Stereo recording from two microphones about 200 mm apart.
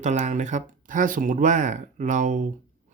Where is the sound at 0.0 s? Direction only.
35° right (ahead or behind).